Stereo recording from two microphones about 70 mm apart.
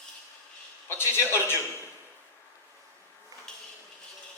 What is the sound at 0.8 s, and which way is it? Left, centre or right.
Speech, left.